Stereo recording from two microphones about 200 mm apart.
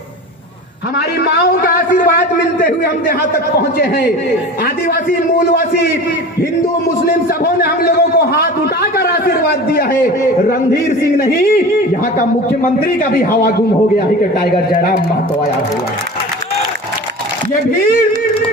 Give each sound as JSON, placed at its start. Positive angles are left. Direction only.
{"t": 0.9, "sound": "a man's voice", "side_deg": 55}
{"t": 7.4, "sound": "a man's voice", "side_deg": 50}
{"t": 14.4, "sound": "a man's voice", "side_deg": 45}